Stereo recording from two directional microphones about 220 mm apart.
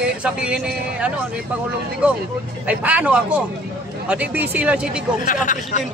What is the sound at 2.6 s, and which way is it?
A man's voice, 5° right (ahead or behind).